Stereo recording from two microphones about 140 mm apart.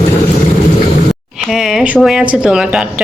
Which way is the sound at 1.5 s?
5° right (ahead or behind).